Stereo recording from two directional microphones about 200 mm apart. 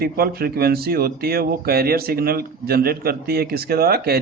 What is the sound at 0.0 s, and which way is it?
Speech, 50° right (ahead or behind).